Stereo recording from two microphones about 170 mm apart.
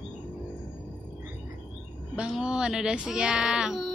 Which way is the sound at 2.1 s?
5° right (ahead or behind).